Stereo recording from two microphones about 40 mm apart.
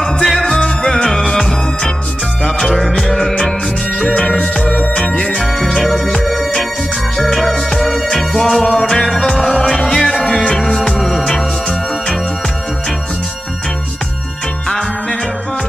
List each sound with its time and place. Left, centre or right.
0.0 s music: centre
4.0 s music: left
5.4 s music: centre